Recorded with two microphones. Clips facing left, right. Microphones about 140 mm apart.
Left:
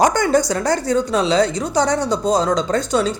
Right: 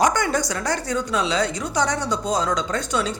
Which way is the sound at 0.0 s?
35° left (ahead or behind).